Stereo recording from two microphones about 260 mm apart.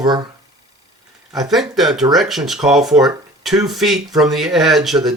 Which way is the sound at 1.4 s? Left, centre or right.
Centre.